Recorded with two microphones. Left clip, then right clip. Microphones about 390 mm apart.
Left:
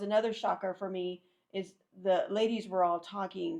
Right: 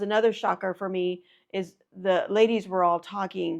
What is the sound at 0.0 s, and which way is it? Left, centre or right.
A woman's voice, right.